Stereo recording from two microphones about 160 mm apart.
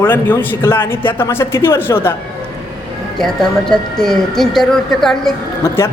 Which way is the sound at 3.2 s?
5° left (ahead or behind).